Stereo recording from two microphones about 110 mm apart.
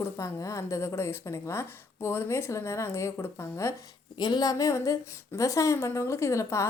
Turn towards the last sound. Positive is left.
turn(degrees=25)  # may be behind; listen again after turning